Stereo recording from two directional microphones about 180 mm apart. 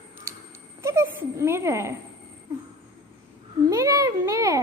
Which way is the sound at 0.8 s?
15° right (ahead or behind).